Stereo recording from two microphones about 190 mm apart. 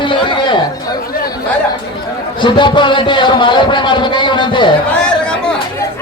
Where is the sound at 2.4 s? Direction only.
25° left (ahead or behind).